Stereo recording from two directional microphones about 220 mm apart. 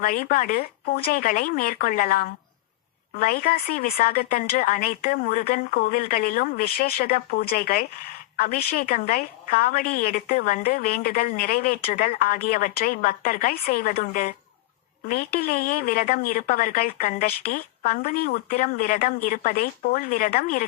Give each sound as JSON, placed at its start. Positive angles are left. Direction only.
{"t": 0.0, "sound": "a woman's voice", "side_deg": 40}